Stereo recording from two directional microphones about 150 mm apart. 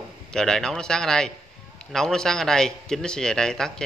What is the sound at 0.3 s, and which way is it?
A man's voice, 5° left (ahead or behind).